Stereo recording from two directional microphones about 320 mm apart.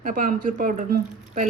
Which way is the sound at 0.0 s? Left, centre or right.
Right.